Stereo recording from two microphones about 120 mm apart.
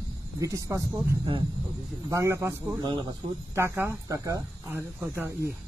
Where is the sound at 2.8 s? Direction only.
40° right (ahead or behind).